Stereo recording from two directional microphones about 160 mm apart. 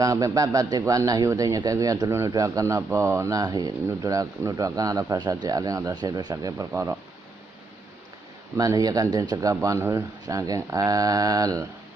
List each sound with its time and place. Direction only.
0.0 s a man's voice: 20° right (ahead or behind)
8.5 s a man's voice: 20° right (ahead or behind)